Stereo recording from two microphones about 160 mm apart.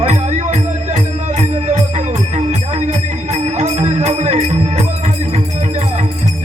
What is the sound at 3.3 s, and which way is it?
Music, 45° right (ahead or behind).